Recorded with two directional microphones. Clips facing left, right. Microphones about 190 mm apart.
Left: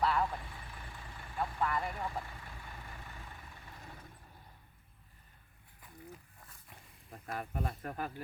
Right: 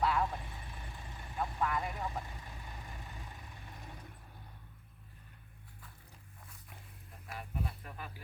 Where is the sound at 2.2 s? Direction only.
20° right (ahead or behind).